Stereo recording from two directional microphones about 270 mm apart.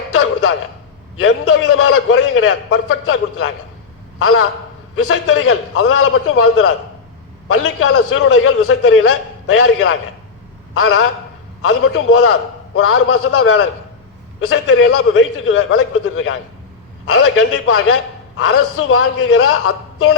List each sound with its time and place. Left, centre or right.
1.2 s a man's voice: left